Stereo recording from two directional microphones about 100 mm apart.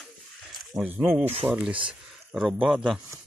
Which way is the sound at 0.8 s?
35° right (ahead or behind).